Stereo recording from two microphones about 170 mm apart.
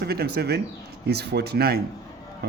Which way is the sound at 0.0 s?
70° right (ahead or behind).